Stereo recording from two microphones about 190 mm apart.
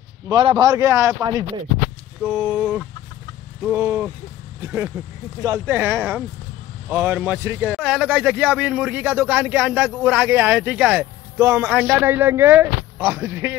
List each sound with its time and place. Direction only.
0.3 s a man's voice: 25° right (ahead or behind)